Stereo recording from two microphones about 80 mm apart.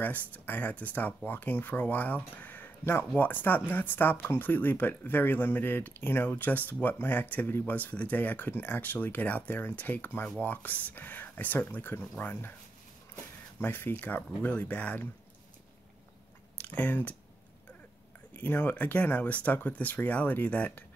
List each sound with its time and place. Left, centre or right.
0.0 s speech: left
16.5 s speech: centre
18.3 s speech: left